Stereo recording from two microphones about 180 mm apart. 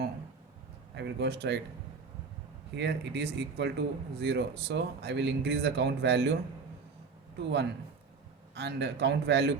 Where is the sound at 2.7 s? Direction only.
70° right (ahead or behind).